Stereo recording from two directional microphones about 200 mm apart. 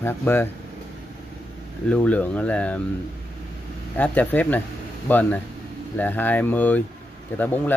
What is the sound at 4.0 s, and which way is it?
Speech, 10° left (ahead or behind).